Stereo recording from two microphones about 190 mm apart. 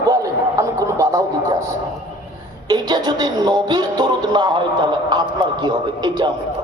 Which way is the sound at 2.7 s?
20° right (ahead or behind).